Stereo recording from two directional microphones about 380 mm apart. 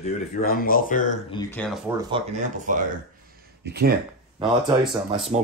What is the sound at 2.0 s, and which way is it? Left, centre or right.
Speech, centre.